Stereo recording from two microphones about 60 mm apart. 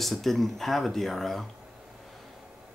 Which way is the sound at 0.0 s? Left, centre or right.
Centre.